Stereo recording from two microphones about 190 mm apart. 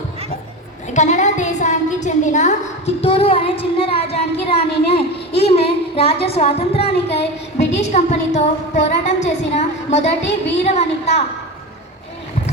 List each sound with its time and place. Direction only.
0.9 s a woman's voice: 40° left (ahead or behind)
7.1 s a sound: 65° left (ahead or behind)
7.8 s a woman's voice: 35° left (ahead or behind)